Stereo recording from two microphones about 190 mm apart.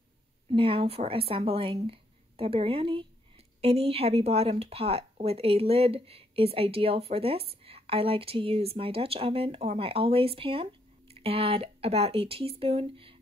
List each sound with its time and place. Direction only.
0.5 s speech: 30° right (ahead or behind)